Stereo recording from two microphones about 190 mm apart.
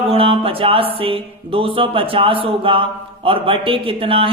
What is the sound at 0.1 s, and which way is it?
Speech, 30° right (ahead or behind).